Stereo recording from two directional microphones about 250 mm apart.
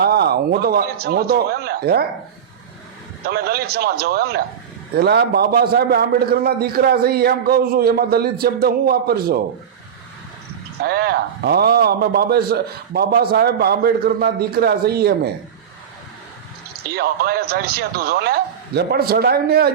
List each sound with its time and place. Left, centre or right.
0.0 s a man's voice: right
3.2 s a man's voice: right
10.8 s a man's voice: right
16.9 s a man's voice: right